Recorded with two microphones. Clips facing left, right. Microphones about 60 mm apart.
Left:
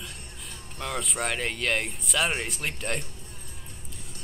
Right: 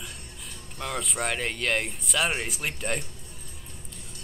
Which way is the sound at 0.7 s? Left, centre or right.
Centre.